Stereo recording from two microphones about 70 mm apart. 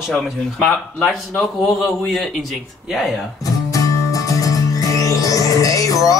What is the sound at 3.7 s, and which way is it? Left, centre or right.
Music, left.